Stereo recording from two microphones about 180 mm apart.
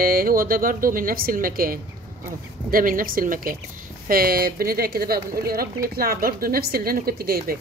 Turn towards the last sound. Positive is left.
turn(degrees=-55)  # may be behind; listen again after turning